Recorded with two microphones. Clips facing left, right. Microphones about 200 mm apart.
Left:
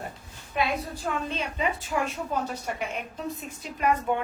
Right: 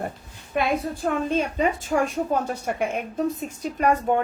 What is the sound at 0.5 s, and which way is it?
A woman's voice, 55° right (ahead or behind).